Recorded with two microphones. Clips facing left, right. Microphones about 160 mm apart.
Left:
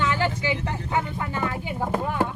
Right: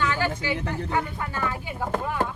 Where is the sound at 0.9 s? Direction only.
20° left (ahead or behind).